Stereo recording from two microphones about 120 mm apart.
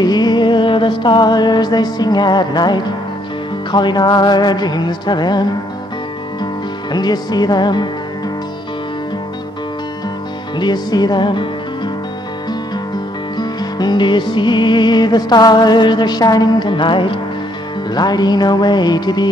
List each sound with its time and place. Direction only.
0.0 s music: 35° left (ahead or behind)
10.6 s music: 35° left (ahead or behind)
13.4 s music: 35° left (ahead or behind)